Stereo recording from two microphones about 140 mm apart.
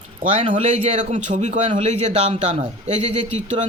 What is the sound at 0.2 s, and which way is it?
A man's voice, 65° right (ahead or behind).